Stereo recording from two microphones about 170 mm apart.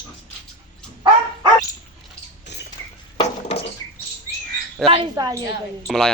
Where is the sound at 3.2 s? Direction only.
35° left (ahead or behind).